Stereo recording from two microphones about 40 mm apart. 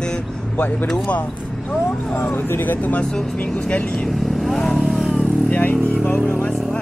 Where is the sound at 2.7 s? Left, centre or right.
Left.